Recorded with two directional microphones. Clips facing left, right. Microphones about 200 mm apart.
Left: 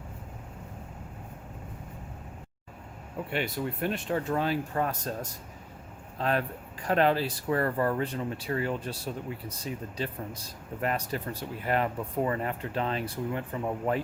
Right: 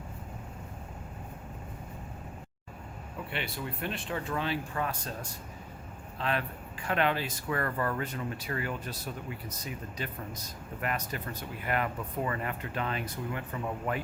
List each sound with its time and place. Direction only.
3.2 s speech: 45° left (ahead or behind)